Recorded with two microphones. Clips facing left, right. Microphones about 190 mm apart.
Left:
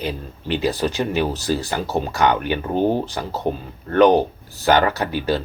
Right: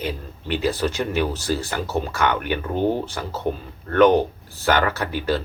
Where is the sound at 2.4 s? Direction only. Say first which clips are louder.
Left 2 dB; 20° left (ahead or behind).